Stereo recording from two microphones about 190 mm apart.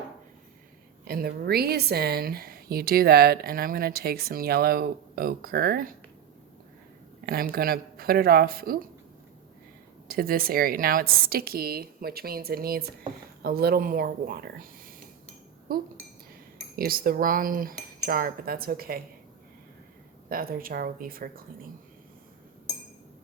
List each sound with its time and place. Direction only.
1.0 s speech: 50° right (ahead or behind)
7.3 s speech: 50° right (ahead or behind)
10.1 s speech: 50° right (ahead or behind)
20.3 s speech: 50° right (ahead or behind)